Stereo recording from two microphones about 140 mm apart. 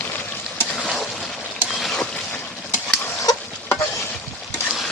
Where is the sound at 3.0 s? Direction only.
20° left (ahead or behind).